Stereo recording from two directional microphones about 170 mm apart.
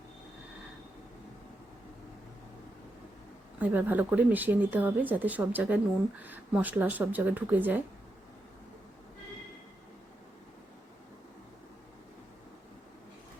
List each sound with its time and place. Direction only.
3.6 s speech: 10° right (ahead or behind)